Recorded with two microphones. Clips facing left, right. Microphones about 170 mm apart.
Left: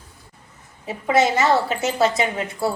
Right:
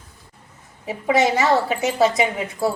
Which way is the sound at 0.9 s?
15° right (ahead or behind).